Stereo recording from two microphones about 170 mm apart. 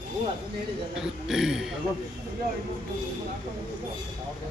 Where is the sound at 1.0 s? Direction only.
5° right (ahead or behind).